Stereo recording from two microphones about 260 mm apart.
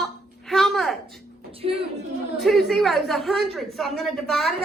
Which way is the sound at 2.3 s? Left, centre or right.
Centre.